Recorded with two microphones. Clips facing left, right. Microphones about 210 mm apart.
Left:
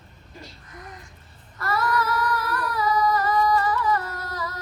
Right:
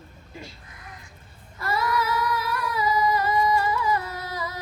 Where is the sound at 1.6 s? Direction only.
Centre (ahead or behind).